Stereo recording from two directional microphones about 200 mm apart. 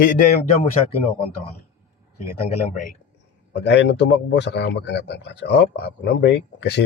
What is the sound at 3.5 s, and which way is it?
A man's voice, 60° left (ahead or behind).